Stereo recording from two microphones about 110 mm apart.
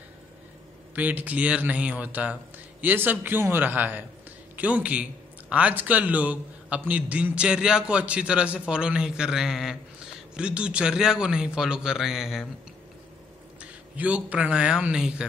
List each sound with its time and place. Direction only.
0.9 s a man's voice: 15° right (ahead or behind)
13.6 s speech: 10° right (ahead or behind)